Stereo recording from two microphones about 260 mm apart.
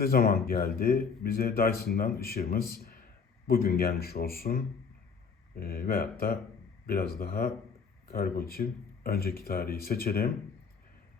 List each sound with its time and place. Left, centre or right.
0.0 s speech: left